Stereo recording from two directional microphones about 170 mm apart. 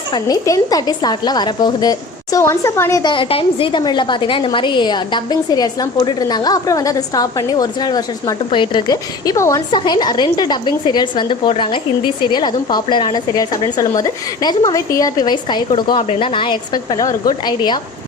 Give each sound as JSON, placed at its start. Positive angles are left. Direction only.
{"t": 0.1, "sound": "speech", "side_deg": 20}